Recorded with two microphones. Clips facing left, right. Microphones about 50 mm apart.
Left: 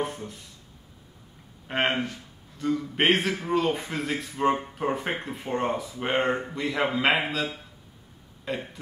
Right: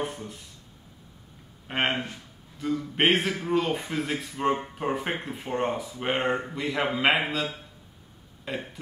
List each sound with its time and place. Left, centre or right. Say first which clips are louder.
0.0 s a man's voice: left 2 dB; centre
1.7 s a man's voice: left 1 dB; centre
8.5 s a man's voice: left 2 dB; centre